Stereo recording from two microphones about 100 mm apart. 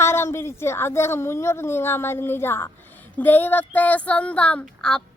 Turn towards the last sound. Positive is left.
turn(degrees=5)  # may be behind; listen again after turning